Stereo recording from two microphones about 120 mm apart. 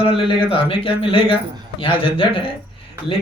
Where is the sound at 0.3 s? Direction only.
45° left (ahead or behind).